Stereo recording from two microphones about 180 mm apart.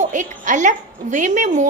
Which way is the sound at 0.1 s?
45° right (ahead or behind).